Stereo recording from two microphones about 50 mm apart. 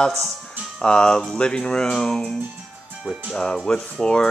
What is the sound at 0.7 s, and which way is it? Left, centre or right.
Speech, centre.